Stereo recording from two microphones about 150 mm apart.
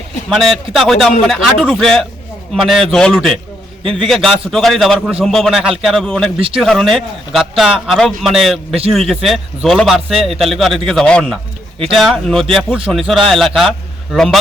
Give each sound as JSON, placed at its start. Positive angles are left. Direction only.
{"t": 0.3, "sound": "a man's voice", "side_deg": 0}
{"t": 3.8, "sound": "a man's voice", "side_deg": -35}
{"t": 4.1, "sound": "a man's voice", "side_deg": 0}